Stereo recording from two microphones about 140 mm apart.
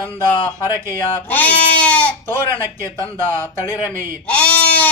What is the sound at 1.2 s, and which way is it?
Goat, 10° left (ahead or behind).